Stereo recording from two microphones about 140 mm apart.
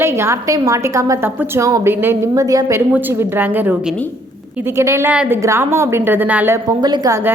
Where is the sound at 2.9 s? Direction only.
15° right (ahead or behind).